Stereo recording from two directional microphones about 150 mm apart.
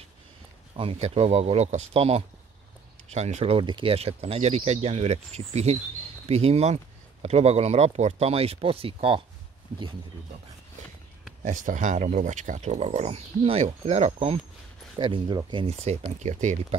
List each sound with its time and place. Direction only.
0.7 s speech: 40° right (ahead or behind)
11.4 s speech: 60° right (ahead or behind); by 14.4 s 40° right (ahead or behind)
15.0 s speech: 30° right (ahead or behind)
15.8 s speech: 45° right (ahead or behind)